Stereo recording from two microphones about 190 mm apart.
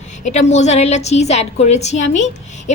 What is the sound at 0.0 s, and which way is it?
A woman's voice, 40° left (ahead or behind).